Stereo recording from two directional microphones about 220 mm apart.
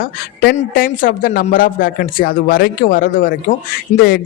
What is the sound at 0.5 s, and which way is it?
Speech, 35° left (ahead or behind).